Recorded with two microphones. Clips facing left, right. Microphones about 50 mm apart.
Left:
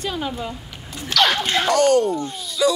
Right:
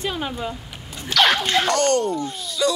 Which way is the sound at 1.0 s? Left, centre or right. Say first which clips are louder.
Right 1 dB; centre.